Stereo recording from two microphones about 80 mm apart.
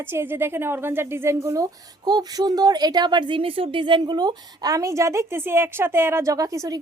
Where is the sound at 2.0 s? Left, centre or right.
Right.